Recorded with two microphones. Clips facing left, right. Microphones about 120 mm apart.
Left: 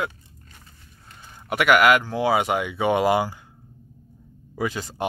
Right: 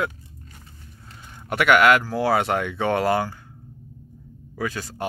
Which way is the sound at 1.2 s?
Centre (ahead or behind).